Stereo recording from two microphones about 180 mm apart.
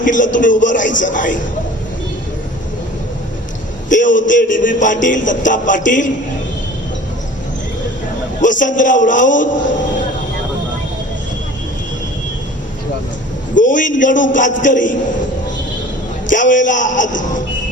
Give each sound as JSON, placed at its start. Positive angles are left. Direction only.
{"t": 0.0, "sound": "music", "side_deg": 45}
{"t": 3.8, "sound": "a man's voice", "side_deg": 45}
{"t": 4.3, "sound": "music", "side_deg": 45}
{"t": 8.4, "sound": "music", "side_deg": 45}
{"t": 13.6, "sound": "music", "side_deg": 45}
{"t": 16.3, "sound": "music", "side_deg": 45}